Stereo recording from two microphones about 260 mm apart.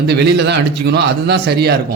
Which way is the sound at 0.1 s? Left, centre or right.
Right.